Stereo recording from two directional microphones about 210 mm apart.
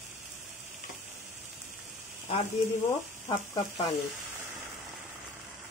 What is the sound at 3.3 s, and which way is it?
Speech, 25° left (ahead or behind).